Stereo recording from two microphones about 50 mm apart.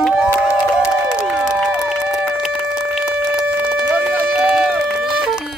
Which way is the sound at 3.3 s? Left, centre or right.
Right.